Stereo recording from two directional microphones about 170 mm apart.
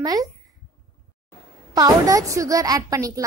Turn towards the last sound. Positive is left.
turn(degrees=-20)  # may be behind; listen again after turning